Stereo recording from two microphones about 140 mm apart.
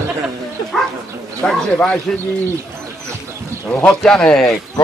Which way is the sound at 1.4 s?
10° left (ahead or behind).